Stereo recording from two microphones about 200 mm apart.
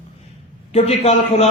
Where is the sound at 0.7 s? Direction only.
30° left (ahead or behind).